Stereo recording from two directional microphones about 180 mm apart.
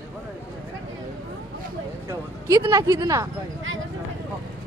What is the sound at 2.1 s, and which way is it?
Speech, 20° right (ahead or behind).